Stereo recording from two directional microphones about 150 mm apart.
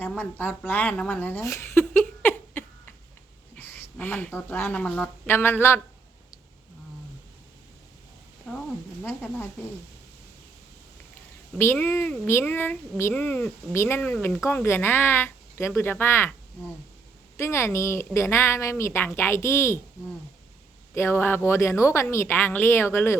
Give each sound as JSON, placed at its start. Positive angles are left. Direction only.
{"t": 0.0, "sound": "speech", "side_deg": 10}
{"t": 2.2, "sound": "a sound", "side_deg": 10}
{"t": 3.5, "sound": "speech", "side_deg": 10}
{"t": 8.4, "sound": "speech", "side_deg": 5}
{"t": 11.5, "sound": "speech", "side_deg": 15}
{"t": 17.3, "sound": "speech", "side_deg": 20}
{"t": 20.9, "sound": "speech", "side_deg": 15}